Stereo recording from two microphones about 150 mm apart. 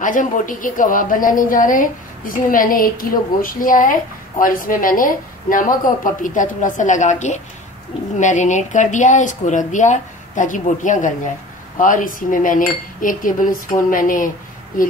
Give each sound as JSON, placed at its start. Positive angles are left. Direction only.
{"t": 0.0, "sound": "a woman's voice", "side_deg": 60}